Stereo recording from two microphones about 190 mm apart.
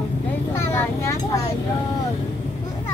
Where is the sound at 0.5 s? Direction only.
15° left (ahead or behind).